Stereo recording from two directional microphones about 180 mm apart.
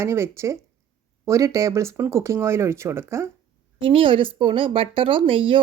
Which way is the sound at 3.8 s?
30° right (ahead or behind).